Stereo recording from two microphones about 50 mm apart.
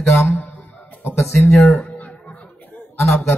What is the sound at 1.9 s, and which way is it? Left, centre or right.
Music, left.